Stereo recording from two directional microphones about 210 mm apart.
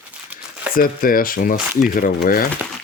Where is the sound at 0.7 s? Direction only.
45° left (ahead or behind).